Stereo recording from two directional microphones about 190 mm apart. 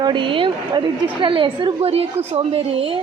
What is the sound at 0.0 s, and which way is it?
A woman's voice, 25° right (ahead or behind).